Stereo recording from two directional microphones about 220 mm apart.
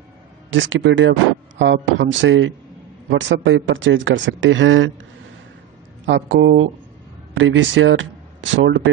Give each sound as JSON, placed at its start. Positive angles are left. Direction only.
{"t": 0.5, "sound": "speech", "side_deg": -60}
{"t": 6.0, "sound": "speech", "side_deg": -55}